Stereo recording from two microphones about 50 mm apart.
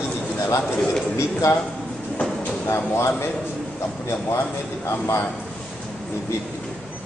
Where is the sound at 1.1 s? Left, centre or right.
Left.